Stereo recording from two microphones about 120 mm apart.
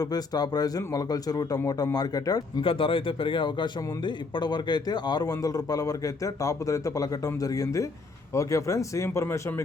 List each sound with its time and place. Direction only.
0.0 s a man's voice: 35° left (ahead or behind)
2.6 s a man's voice: 45° left (ahead or behind); by 9.6 s 25° left (ahead or behind)